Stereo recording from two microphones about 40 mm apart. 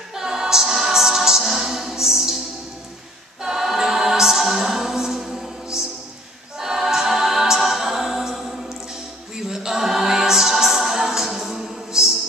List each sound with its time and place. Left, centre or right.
0.1 s choir: centre
3.4 s choir: centre